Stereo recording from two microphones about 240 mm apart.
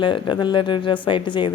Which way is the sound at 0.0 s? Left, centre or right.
Centre.